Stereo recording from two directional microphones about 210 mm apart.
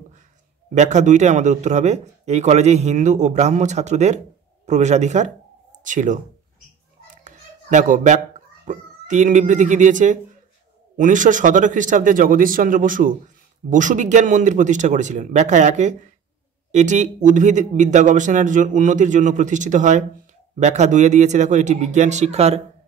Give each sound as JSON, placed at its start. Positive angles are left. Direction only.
{"t": 0.7, "sound": "speech", "side_deg": -35}
{"t": 7.2, "sound": "a sound", "side_deg": -35}
{"t": 8.6, "sound": "speech", "side_deg": -35}